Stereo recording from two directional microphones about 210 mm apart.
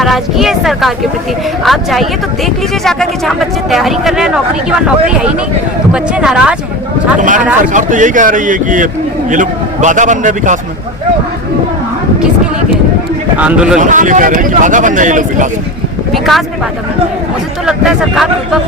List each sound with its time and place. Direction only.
0.0 s speech: centre (ahead or behind)
5.9 s speech: 5° right (ahead or behind)
7.2 s speech: 40° right (ahead or behind)
13.3 s speech: 5° right (ahead or behind)
13.7 s speech: 35° right (ahead or behind)
16.1 s speech: centre (ahead or behind)
17.7 s speech: centre (ahead or behind)